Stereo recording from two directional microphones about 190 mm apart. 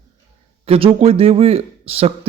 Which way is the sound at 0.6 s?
30° right (ahead or behind).